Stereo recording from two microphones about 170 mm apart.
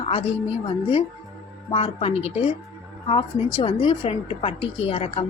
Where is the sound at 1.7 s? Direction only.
35° left (ahead or behind).